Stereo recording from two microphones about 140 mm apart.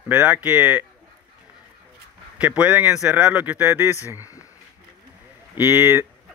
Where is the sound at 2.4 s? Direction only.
10° right (ahead or behind).